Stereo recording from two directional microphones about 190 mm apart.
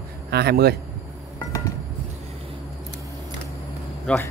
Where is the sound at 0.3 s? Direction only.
55° right (ahead or behind).